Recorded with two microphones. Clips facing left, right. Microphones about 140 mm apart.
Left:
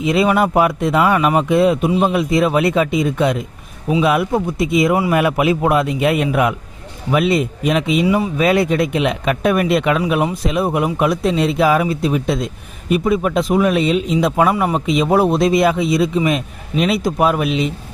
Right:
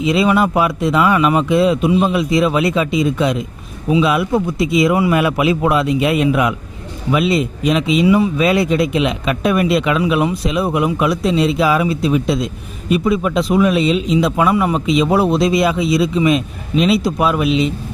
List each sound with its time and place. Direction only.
0.0 s a man's voice: 50° left (ahead or behind)
8.0 s a man's voice: 40° left (ahead or behind)